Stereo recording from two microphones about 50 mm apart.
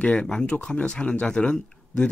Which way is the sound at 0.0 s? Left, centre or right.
Left.